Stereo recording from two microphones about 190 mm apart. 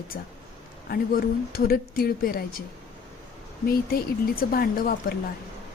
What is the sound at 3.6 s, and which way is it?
Speech, 50° left (ahead or behind).